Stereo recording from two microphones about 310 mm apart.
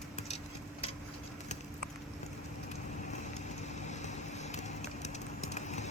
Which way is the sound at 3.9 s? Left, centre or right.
Left.